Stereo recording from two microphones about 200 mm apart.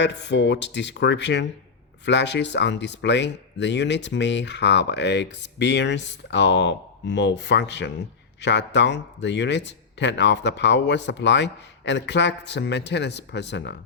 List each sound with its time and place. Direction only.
0.0 s speech: 60° left (ahead or behind)